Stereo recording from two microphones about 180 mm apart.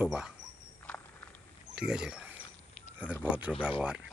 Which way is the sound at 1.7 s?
5° right (ahead or behind).